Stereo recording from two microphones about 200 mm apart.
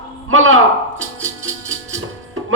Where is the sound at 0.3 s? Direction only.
80° right.